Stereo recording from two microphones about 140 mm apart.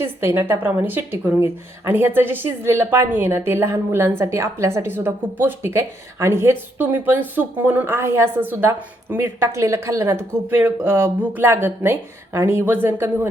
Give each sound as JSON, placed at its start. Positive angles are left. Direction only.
{"t": 0.0, "sound": "a woman's voice", "side_deg": -15}